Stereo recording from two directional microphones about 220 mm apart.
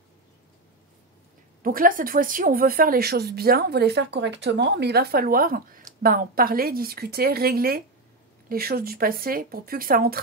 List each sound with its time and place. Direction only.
1.6 s speech: 40° right (ahead or behind)